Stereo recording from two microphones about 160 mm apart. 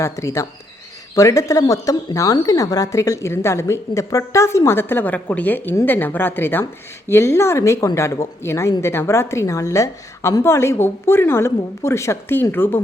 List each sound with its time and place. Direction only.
0.0 s speech: 20° left (ahead or behind)